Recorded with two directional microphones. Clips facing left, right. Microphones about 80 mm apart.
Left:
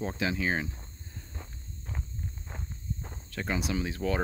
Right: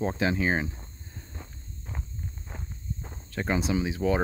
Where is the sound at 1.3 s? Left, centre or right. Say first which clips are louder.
Right 1 dB; centre.